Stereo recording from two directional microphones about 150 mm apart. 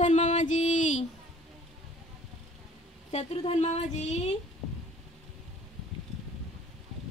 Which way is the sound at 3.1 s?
45° left (ahead or behind).